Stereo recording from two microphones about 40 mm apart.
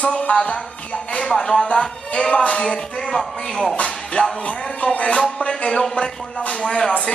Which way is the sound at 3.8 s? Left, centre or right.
Left.